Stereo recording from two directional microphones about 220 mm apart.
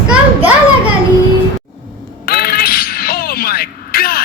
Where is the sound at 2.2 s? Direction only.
45° left (ahead or behind).